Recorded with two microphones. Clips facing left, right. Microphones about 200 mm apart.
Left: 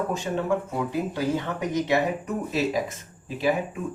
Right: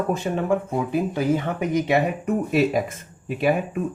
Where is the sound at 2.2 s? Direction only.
55° right (ahead or behind).